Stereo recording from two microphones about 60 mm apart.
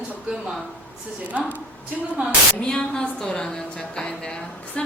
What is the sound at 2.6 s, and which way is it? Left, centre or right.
Speech, centre.